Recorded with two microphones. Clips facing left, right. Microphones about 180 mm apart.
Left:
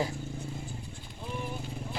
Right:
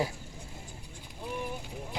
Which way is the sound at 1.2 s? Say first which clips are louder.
Right 1 dB; 10° right (ahead or behind).